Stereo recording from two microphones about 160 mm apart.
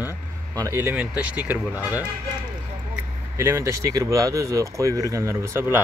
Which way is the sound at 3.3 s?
20° right (ahead or behind).